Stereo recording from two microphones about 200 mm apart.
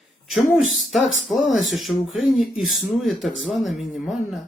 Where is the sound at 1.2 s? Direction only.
Centre (ahead or behind).